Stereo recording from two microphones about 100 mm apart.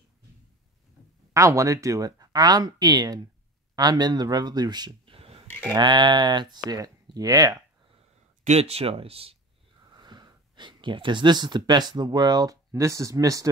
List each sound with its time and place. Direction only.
1.3 s speech: 30° right (ahead or behind)
5.0 s a sound: 70° right (ahead or behind)
5.7 s speech: 50° right (ahead or behind)
8.5 s speech: 90° right
9.9 s speech: 45° right (ahead or behind)